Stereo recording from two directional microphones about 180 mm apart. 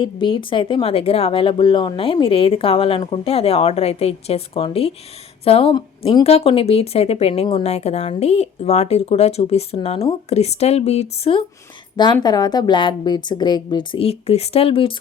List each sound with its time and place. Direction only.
0.0 s a woman's voice: 25° left (ahead or behind)